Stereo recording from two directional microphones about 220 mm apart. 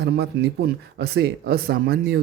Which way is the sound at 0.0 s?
50° right (ahead or behind).